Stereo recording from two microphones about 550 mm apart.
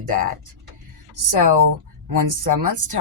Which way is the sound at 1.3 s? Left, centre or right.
Right.